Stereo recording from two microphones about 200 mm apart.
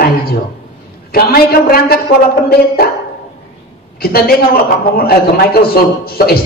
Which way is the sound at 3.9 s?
50° left (ahead or behind).